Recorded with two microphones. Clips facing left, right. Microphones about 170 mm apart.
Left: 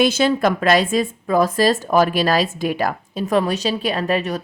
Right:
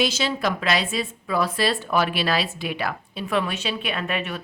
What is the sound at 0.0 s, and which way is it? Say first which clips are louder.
A woman's voice: left 7 dB; 50° left (ahead or behind).